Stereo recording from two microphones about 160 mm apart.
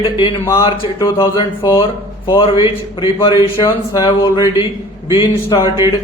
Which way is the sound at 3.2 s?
35° left (ahead or behind).